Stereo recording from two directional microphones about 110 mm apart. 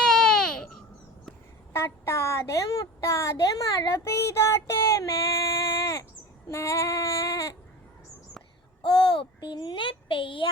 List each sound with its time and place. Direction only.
0.0 s baby cry: 5° left (ahead or behind)
1.7 s a woman's voice: 25° left (ahead or behind)
6.5 s child singing: 25° left (ahead or behind)
8.8 s a child's voice: 50° left (ahead or behind)